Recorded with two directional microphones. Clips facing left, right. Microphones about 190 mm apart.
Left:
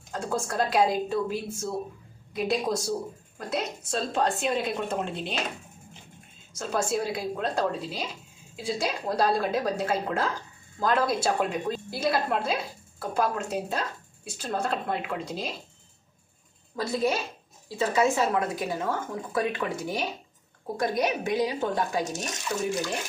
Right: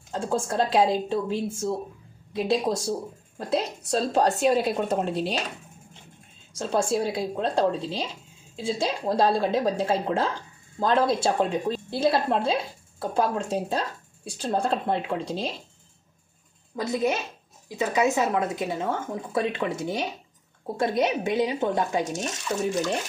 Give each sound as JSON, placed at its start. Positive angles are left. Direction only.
{"t": 0.1, "sound": "a woman's voice", "side_deg": -25}
{"t": 6.5, "sound": "speech", "side_deg": -30}
{"t": 16.7, "sound": "a woman's voice", "side_deg": -20}